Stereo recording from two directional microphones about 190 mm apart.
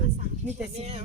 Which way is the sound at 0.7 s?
35° right (ahead or behind).